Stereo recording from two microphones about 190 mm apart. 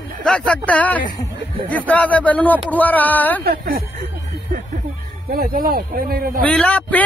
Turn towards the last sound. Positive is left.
turn(degrees=10)  # may be behind; listen again after turning